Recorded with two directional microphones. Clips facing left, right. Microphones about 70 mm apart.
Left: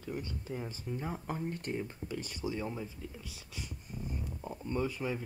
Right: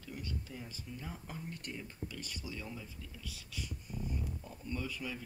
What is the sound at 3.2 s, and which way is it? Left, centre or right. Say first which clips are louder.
Speech: even; left.